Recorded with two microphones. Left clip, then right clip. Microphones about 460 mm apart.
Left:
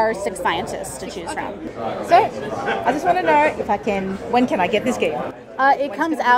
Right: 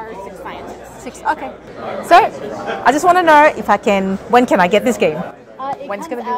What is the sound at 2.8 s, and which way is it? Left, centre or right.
A woman's voice, right.